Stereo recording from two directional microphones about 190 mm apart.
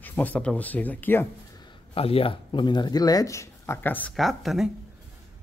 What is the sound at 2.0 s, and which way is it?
Speech, 30° left (ahead or behind).